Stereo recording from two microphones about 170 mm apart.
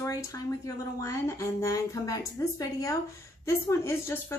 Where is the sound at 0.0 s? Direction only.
15° left (ahead or behind).